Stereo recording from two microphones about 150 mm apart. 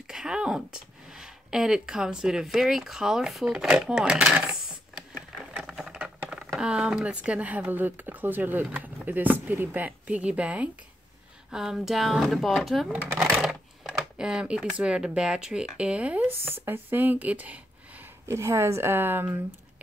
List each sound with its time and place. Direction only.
0.1 s speech: 5° right (ahead or behind)